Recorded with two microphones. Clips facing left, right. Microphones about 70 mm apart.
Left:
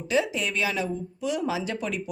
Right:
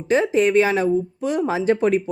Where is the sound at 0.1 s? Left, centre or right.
Right.